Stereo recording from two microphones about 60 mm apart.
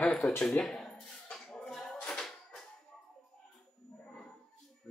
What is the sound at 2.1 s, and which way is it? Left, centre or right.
Music, centre.